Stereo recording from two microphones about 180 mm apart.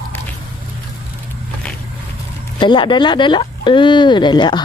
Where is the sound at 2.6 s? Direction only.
25° left (ahead or behind).